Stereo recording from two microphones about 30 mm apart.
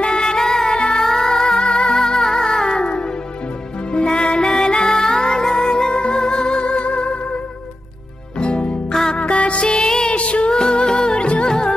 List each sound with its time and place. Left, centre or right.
0.0 s music: left
0.4 s music: centre
0.7 s music: left
1.0 s music: centre
2.8 s music: left
8.4 s music: left
9.8 s music: left
10.0 s music: left
10.5 s music: left
11.4 s music: left